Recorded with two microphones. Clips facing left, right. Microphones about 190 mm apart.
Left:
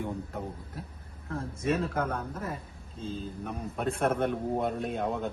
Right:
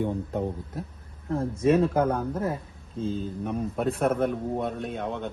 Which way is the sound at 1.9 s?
30° right (ahead or behind).